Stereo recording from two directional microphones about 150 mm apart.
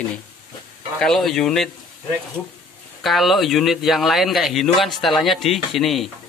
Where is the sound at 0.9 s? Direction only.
Centre (ahead or behind).